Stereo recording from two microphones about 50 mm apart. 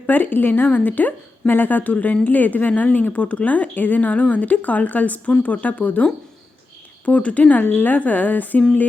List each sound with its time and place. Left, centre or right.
0.1 s speech: left